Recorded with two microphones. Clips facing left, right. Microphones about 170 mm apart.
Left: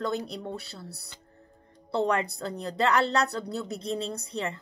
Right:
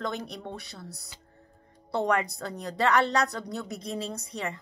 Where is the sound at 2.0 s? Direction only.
30° left (ahead or behind).